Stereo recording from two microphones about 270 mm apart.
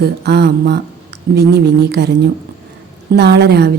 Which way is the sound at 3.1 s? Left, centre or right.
Right.